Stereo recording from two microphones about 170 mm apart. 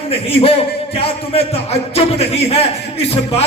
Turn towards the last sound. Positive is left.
turn(degrees=35)  # may be behind; listen again after turning